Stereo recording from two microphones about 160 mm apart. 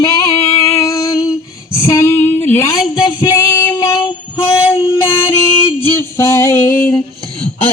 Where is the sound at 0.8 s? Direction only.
20° left (ahead or behind).